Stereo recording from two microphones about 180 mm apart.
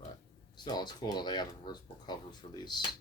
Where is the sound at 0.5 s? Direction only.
25° left (ahead or behind).